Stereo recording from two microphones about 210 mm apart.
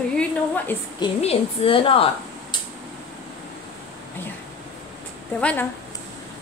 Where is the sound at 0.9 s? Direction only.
25° left (ahead or behind).